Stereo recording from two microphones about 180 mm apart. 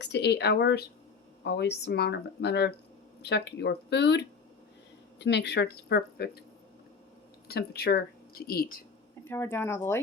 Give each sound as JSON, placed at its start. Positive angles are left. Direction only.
{"t": 0.0, "sound": "speech", "side_deg": 70}
{"t": 7.4, "sound": "speech", "side_deg": 60}
{"t": 9.2, "sound": "speech", "side_deg": 15}